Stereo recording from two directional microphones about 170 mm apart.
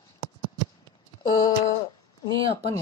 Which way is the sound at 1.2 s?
25° left (ahead or behind).